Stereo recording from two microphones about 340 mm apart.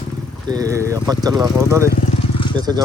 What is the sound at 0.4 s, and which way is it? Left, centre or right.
Speech, centre.